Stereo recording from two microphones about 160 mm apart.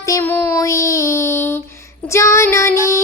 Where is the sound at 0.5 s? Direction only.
20° left (ahead or behind).